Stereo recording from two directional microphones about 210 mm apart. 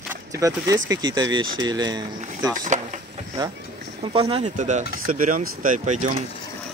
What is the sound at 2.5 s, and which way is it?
Speech, 40° right (ahead or behind).